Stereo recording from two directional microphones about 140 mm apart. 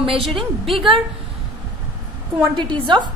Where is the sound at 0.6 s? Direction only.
Centre (ahead or behind).